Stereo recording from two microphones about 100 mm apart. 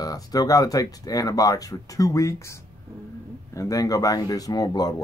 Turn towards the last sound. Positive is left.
turn(degrees=40)  # may be behind; listen again after turning